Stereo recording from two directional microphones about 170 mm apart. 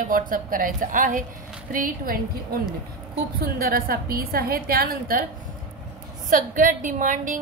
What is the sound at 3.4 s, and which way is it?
A woman's voice, 65° right (ahead or behind).